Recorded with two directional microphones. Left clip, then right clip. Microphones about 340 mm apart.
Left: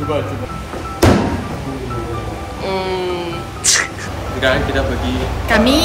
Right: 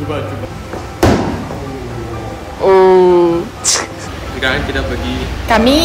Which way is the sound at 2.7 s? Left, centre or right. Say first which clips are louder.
Right 13 dB; right.